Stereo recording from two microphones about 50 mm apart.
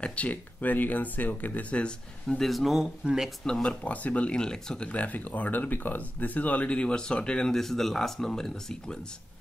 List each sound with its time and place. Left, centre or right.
0.0 s speech: left
2.2 s speech: centre
3.0 s speech: centre
3.4 s speech: centre
3.8 s speech: left
7.5 s speech: centre